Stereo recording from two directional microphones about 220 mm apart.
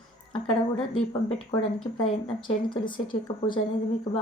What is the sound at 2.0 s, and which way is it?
A woman's voice, 20° left (ahead or behind).